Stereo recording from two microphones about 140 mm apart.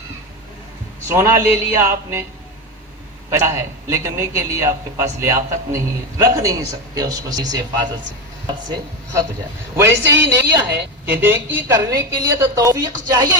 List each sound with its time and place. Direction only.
1.0 s a woman's voice: 25° right (ahead or behind)
3.2 s a woman's voice: 20° right (ahead or behind)
9.7 s a woman's voice: 15° right (ahead or behind)